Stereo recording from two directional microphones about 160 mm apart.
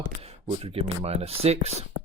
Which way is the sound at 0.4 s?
40° right (ahead or behind).